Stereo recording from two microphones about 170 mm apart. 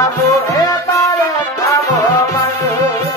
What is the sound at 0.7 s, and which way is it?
Music, 20° left (ahead or behind).